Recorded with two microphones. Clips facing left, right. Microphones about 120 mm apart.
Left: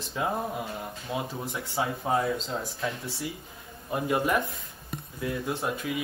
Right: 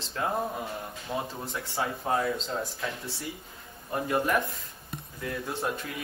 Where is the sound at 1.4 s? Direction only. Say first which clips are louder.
Left 1 dB; 15° left (ahead or behind).